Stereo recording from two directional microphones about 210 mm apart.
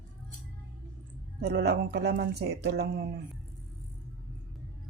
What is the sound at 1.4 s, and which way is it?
Speech, 50° right (ahead or behind).